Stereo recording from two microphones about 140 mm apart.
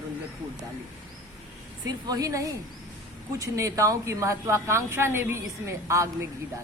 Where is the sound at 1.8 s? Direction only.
25° right (ahead or behind).